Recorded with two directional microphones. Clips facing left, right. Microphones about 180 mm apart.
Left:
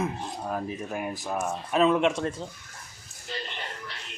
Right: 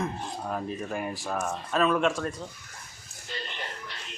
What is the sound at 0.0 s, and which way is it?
Speech, 5° left (ahead or behind).